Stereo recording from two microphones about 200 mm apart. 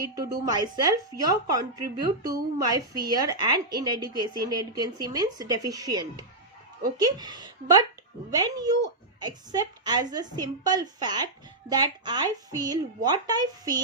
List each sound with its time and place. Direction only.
0.0 s a woman's voice: 20° right (ahead or behind)